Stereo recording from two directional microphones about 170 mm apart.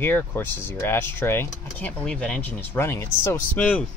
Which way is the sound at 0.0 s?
10° left (ahead or behind).